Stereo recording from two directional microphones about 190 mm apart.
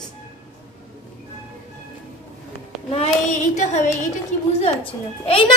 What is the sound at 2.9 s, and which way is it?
Child singing, 35° left (ahead or behind).